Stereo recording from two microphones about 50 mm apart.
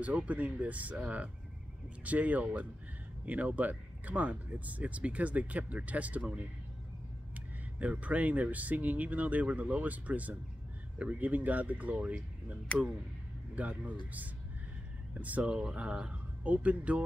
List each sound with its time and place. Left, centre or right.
0.0 s speech: right
7.8 s speech: right
13.6 s speech: right
15.4 s speech: centre